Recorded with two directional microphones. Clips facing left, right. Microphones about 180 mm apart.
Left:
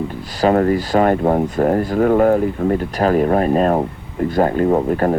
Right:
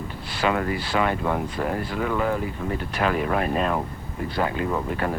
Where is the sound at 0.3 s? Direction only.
40° left (ahead or behind).